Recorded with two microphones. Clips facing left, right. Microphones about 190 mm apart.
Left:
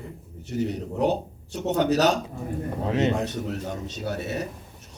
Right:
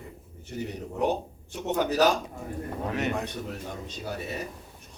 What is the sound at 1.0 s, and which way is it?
A man's voice, 70° left (ahead or behind).